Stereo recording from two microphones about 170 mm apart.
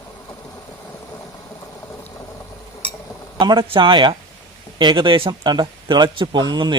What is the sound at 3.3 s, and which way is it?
A man's voice, 25° right (ahead or behind).